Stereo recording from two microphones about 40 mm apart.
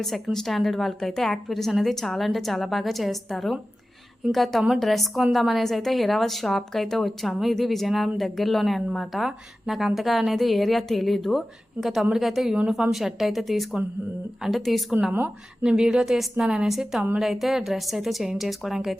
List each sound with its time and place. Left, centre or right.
0.0 s a woman's voice: centre
13.1 s a woman's voice: centre
15.6 s a woman's voice: centre